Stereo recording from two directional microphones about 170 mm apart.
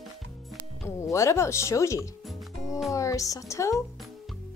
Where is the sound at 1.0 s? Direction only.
15° left (ahead or behind).